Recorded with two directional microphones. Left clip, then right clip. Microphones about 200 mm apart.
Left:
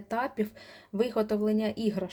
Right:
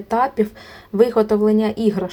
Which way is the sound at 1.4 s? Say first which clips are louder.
Right 12 dB; 35° left (ahead or behind).